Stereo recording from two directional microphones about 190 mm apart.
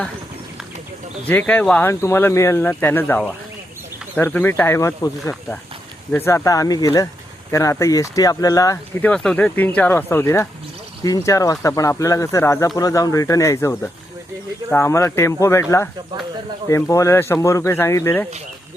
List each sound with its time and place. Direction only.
1.3 s speech: 10° left (ahead or behind)